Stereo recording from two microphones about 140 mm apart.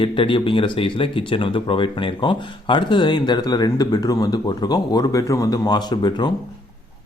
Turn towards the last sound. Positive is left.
turn(degrees=30)  # may be behind; listen again after turning